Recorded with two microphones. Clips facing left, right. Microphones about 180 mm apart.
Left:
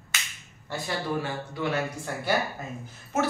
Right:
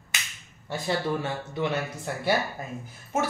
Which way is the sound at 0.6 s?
25° right (ahead or behind).